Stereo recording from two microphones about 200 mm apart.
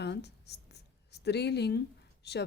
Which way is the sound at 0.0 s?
55° left (ahead or behind).